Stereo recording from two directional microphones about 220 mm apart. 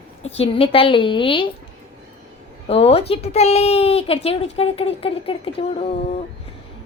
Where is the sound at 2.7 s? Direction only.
25° left (ahead or behind).